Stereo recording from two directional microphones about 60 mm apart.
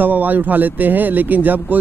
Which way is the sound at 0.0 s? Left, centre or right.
Right.